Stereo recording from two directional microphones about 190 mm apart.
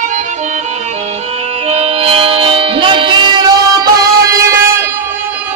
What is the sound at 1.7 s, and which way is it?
Music, 30° right (ahead or behind).